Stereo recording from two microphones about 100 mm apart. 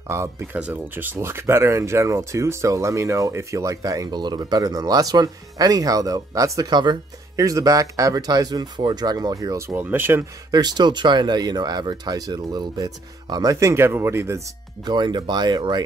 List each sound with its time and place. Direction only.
0.1 s speech: 25° right (ahead or behind)
0.6 s speech: 15° right (ahead or behind)
10.5 s speech: 45° right (ahead or behind); by 14.4 s 25° right (ahead or behind)
14.9 s speech: 45° right (ahead or behind)